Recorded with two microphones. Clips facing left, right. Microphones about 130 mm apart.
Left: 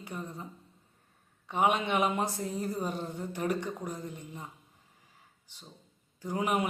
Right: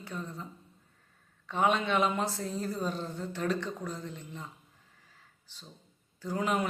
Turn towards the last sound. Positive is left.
turn(degrees=15)  # may be behind; listen again after turning